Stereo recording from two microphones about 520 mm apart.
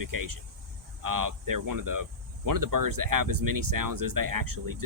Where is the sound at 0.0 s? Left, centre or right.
Right.